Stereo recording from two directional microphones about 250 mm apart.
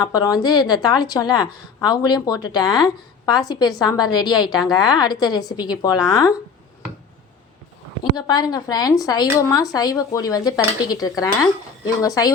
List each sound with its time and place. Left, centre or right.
0.0 s a woman's voice: centre
8.1 s a woman's voice: centre